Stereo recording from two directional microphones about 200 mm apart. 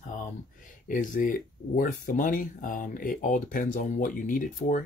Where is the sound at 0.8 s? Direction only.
40° left (ahead or behind).